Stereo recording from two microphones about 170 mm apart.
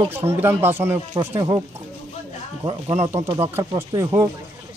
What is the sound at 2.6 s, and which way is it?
Speech, 15° right (ahead or behind).